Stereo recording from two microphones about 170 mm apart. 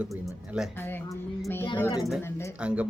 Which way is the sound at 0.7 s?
15° left (ahead or behind).